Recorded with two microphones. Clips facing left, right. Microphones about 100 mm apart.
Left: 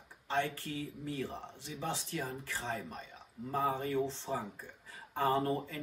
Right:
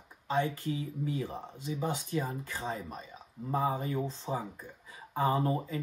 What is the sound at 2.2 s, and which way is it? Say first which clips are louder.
Speech: right 3 dB; 25° right (ahead or behind).